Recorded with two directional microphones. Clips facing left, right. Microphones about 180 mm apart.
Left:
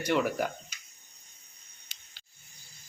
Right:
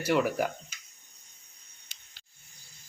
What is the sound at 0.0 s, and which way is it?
Speech, 5° right (ahead or behind).